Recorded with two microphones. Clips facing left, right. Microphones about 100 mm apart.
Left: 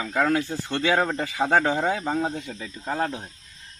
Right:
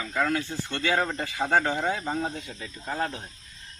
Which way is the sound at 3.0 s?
10° left (ahead or behind).